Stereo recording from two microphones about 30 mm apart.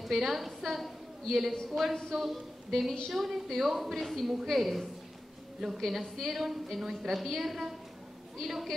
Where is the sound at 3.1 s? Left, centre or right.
Centre.